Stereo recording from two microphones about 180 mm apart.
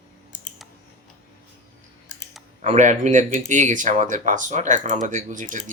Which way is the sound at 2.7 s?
40° right (ahead or behind).